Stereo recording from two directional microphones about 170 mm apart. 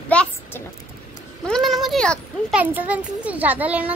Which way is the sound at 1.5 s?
Centre (ahead or behind).